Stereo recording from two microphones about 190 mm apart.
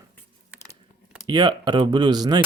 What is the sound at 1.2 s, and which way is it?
Speech, 25° right (ahead or behind).